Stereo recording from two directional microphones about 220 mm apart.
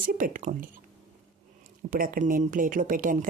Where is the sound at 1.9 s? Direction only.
40° right (ahead or behind).